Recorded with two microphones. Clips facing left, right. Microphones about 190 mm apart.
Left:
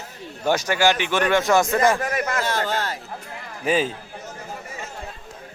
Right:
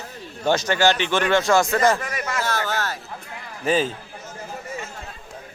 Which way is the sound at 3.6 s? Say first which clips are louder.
Even; 10° left (ahead or behind).